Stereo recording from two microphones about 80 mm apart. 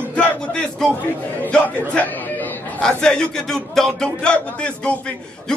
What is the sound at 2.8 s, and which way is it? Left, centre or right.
A man's voice, centre.